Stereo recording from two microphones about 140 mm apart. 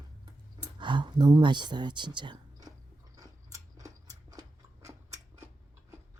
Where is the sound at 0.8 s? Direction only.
35° right (ahead or behind).